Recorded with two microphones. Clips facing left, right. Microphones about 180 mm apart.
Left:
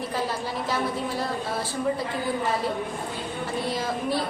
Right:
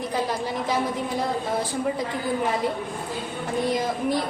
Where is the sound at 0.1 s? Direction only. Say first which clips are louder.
Right 2 dB; 15° right (ahead or behind).